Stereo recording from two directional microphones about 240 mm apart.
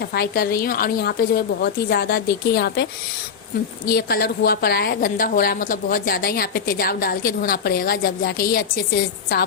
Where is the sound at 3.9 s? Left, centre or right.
Left.